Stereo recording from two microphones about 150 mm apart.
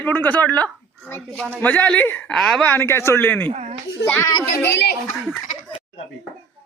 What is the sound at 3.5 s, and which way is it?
Speech, 45° right (ahead or behind).